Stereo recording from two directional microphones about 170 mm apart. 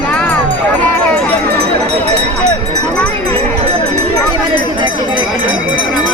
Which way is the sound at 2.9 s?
5° left (ahead or behind).